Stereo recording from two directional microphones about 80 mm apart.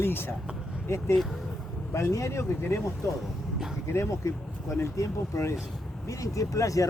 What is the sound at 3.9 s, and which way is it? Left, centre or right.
Speech, left.